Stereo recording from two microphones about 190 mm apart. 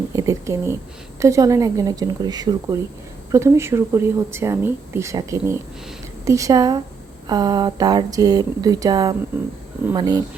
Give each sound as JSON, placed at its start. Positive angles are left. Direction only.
{"t": 0.2, "sound": "a woman's voice", "side_deg": -15}